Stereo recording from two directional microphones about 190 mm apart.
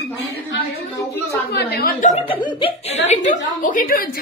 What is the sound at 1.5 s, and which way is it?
Speech, 60° left (ahead or behind).